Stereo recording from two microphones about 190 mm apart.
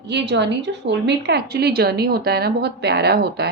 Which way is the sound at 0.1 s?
65° right (ahead or behind).